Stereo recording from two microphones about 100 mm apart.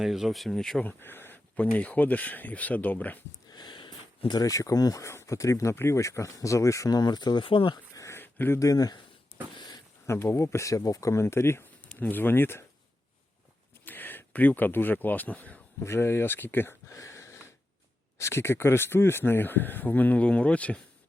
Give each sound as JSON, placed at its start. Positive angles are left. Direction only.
{"t": 0.0, "sound": "speech", "side_deg": -5}
{"t": 0.9, "sound": "speech", "side_deg": 20}
{"t": 3.5, "sound": "speech", "side_deg": 50}
{"t": 7.9, "sound": "a sound", "side_deg": 25}
{"t": 8.5, "sound": "speech", "side_deg": 35}
{"t": 10.1, "sound": "speech", "side_deg": 25}
{"t": 13.8, "sound": "speech", "side_deg": 20}
{"t": 15.8, "sound": "speech", "side_deg": 25}
{"t": 16.9, "sound": "a sound", "side_deg": 35}
{"t": 18.2, "sound": "speech", "side_deg": 25}